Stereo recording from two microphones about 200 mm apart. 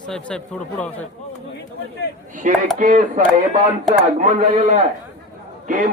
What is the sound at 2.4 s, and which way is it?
A man's voice, 40° right (ahead or behind).